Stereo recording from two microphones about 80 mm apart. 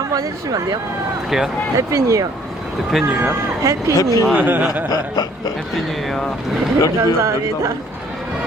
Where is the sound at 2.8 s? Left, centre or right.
Centre.